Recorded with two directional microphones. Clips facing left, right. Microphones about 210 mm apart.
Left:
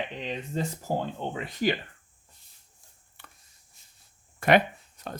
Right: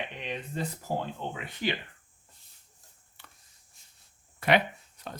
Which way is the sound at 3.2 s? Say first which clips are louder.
Left 3 dB; 55° left (ahead or behind).